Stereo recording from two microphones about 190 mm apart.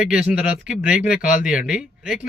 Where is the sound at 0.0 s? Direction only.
5° right (ahead or behind).